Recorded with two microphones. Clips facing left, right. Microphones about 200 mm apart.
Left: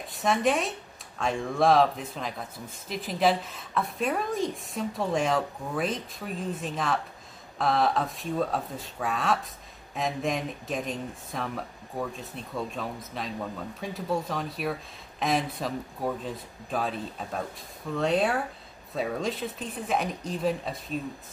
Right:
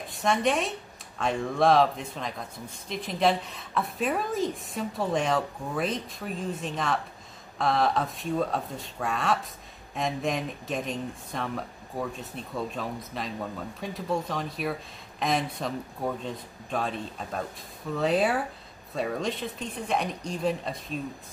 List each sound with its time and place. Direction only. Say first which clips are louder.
0.1 s speech: even; centre (ahead or behind)